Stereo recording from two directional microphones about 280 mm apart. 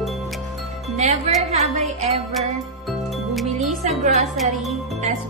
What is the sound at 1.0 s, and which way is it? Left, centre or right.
Speech, right.